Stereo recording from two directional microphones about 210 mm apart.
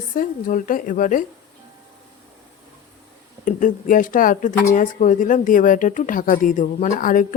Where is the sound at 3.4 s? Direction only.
40° left (ahead or behind).